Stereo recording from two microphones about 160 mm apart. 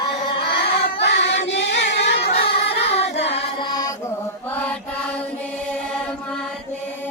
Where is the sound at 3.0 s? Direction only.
90° left.